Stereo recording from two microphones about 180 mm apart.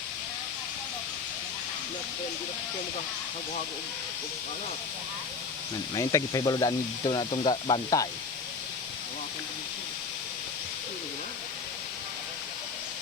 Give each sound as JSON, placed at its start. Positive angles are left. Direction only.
{"t": 5.9, "sound": "speech", "side_deg": 20}